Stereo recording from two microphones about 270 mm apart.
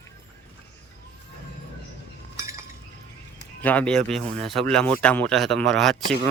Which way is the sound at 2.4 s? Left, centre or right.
Centre.